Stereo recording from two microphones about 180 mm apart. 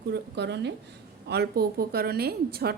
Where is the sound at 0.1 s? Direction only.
70° right (ahead or behind).